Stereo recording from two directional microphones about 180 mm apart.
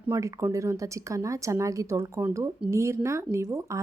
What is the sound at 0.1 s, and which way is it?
A woman's voice, 15° right (ahead or behind).